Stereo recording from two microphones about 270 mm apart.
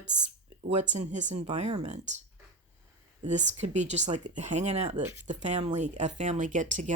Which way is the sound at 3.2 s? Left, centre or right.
Right.